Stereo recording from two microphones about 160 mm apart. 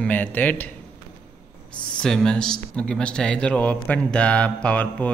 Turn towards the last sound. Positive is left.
turn(degrees=10)  # may be behind; listen again after turning